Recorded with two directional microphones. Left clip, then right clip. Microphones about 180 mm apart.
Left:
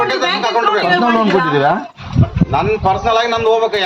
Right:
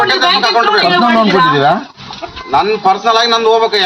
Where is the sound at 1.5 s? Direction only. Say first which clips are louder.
Right 3 dB; 15° right (ahead or behind).